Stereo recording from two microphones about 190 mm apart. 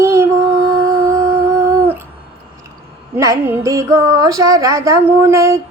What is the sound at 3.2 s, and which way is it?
A woman's voice, 15° right (ahead or behind).